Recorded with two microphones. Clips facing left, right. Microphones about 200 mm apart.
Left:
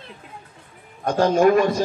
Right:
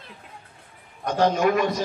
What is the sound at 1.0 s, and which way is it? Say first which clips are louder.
Speech: left 4 dB; 45° left (ahead or behind).